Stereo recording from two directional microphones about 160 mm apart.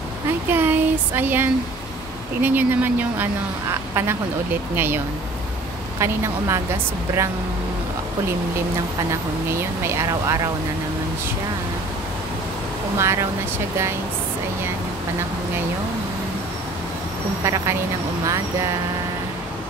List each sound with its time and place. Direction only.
0.5 s a sound: 15° right (ahead or behind)
2.4 s a woman's voice: 10° right (ahead or behind)
9.5 s a woman's voice: 15° right (ahead or behind)
12.9 s a woman's voice: 15° right (ahead or behind)